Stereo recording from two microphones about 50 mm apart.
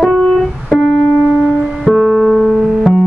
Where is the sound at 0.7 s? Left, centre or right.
Left.